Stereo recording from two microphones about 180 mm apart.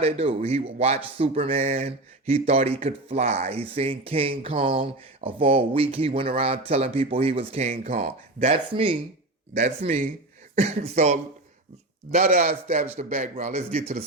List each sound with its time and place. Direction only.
0.0 s a man's voice: 35° right (ahead or behind)